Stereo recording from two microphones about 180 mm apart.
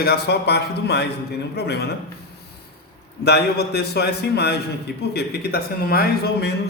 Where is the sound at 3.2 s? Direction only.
65° left (ahead or behind).